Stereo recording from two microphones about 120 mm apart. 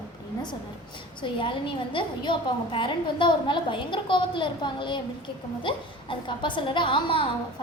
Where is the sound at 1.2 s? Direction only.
45° left (ahead or behind).